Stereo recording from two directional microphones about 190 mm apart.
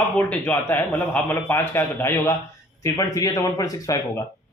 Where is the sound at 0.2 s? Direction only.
10° left (ahead or behind).